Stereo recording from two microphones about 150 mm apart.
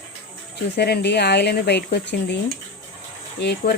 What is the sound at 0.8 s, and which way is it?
Speech, 90° left.